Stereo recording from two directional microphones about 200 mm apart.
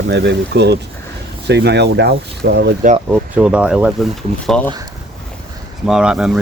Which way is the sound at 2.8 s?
35° right (ahead or behind).